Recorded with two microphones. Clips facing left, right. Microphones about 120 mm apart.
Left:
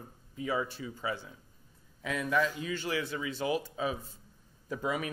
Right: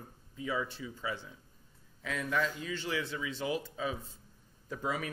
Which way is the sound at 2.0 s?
10° left (ahead or behind).